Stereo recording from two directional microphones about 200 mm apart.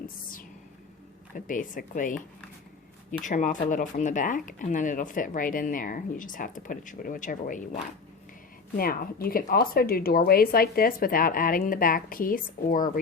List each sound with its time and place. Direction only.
1.5 s speech: 40° left (ahead or behind)